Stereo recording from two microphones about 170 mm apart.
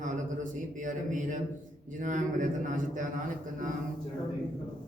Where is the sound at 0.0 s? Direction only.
50° right (ahead or behind).